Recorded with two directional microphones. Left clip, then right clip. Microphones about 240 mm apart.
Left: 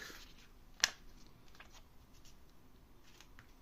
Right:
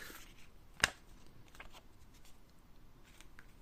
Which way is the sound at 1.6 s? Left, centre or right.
Centre.